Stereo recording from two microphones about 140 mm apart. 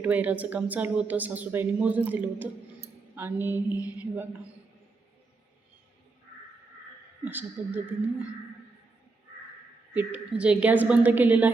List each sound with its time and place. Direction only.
0.0 s a woman's voice: 10° right (ahead or behind)
7.3 s a woman's voice: 15° right (ahead or behind)
9.9 s a woman's voice: 10° right (ahead or behind)